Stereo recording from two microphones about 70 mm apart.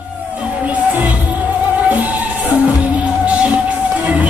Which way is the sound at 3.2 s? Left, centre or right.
Centre.